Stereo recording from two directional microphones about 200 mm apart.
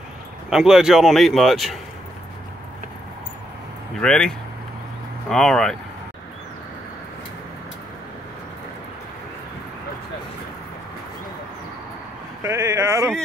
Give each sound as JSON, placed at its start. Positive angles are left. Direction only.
{"t": 0.5, "sound": "speech", "side_deg": -5}
{"t": 4.0, "sound": "speech", "side_deg": 5}
{"t": 12.4, "sound": "speech", "side_deg": -15}